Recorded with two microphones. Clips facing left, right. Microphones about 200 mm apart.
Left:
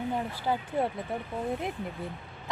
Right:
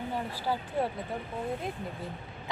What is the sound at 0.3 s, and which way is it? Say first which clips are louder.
Speech: even; 20° left (ahead or behind).